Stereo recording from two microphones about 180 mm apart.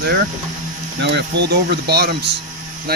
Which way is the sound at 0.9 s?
75° right (ahead or behind).